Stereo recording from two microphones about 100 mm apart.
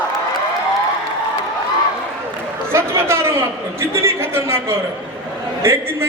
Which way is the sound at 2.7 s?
30° right (ahead or behind).